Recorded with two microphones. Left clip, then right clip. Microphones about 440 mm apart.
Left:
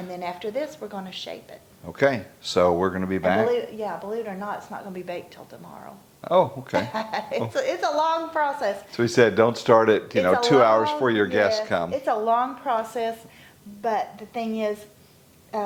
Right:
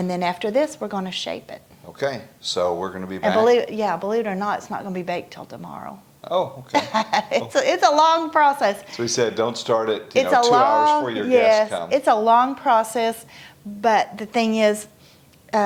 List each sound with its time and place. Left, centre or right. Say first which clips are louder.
0.1 s a woman's voice: right 7 dB; right
1.9 s speech: left 4 dB; left
3.4 s a woman's voice: right 7 dB; right
6.2 s speech: left 3 dB; left
6.7 s a woman's voice: right 6 dB; right
8.9 s speech: left 3 dB; left
11.9 s a woman's voice: right 9 dB; right